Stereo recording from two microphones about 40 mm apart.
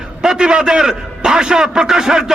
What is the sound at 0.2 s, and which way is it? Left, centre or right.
A man's voice, centre.